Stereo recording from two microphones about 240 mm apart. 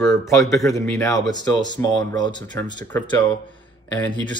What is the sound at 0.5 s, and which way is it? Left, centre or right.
Speech, centre.